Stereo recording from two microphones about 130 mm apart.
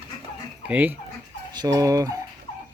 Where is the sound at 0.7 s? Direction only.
10° right (ahead or behind).